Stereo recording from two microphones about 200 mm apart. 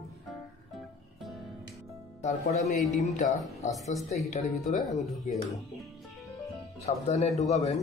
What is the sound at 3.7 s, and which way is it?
Speech, centre (ahead or behind).